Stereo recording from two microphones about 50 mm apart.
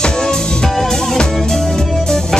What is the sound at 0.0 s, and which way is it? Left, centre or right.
Music, centre.